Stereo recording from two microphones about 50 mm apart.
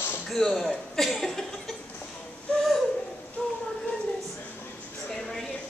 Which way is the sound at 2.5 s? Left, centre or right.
Left.